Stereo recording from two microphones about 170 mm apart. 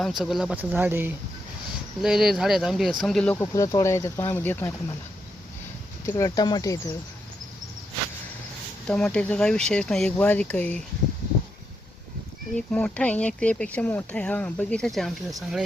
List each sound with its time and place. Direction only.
0.0 s speech: centre (ahead or behind)
3.4 s speech: 20° left (ahead or behind)
6.1 s speech: 20° left (ahead or behind)
8.9 s speech: 5° left (ahead or behind)
12.5 s speech: 5° left (ahead or behind)